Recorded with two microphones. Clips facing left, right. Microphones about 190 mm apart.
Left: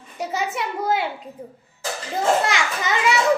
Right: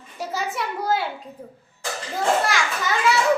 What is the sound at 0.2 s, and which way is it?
Speech, 20° left (ahead or behind).